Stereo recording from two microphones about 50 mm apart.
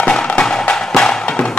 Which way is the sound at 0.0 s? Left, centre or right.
Centre.